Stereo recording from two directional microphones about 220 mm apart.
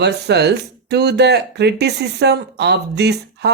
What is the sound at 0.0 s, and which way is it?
Speech, 50° right (ahead or behind).